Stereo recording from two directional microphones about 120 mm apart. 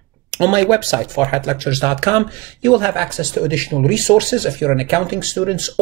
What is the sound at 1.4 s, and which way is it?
Speech, 15° right (ahead or behind).